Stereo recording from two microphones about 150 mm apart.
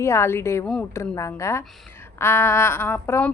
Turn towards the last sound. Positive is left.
turn(degrees=15)  # may be behind; listen again after turning